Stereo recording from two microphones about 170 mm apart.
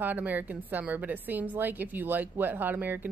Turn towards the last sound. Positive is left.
turn(degrees=-10)  # may be behind; listen again after turning